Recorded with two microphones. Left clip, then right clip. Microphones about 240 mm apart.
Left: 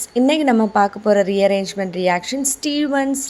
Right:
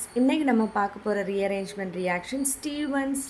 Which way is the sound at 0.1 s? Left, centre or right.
Left.